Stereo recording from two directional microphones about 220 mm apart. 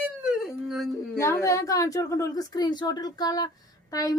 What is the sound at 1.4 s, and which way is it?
A woman's voice, 15° left (ahead or behind).